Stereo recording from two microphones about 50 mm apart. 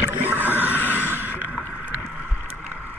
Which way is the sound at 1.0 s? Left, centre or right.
Right.